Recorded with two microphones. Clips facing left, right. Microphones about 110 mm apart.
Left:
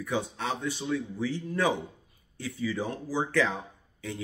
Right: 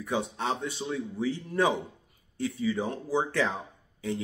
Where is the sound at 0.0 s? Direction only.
25° right (ahead or behind).